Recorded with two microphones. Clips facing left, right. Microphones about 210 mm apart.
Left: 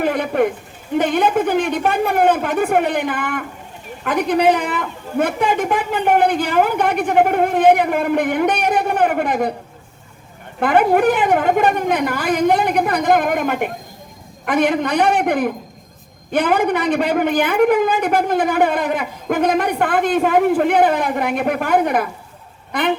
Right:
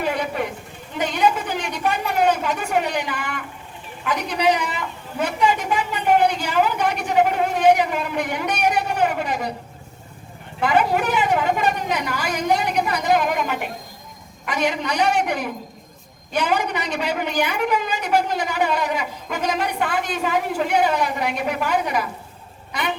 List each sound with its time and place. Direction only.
0.0 s a sound: 55° left (ahead or behind)
0.9 s a woman's voice: 55° left (ahead or behind)
10.6 s a woman's voice: 55° left (ahead or behind)
22.7 s duck: 55° left (ahead or behind)